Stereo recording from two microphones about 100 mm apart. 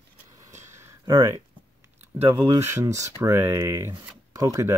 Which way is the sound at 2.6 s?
25° right (ahead or behind).